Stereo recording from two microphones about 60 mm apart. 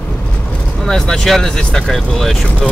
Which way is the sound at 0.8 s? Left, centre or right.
Centre.